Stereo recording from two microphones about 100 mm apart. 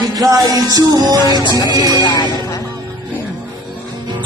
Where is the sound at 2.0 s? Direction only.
45° left (ahead or behind).